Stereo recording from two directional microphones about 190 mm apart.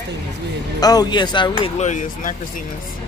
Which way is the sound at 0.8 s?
20° left (ahead or behind).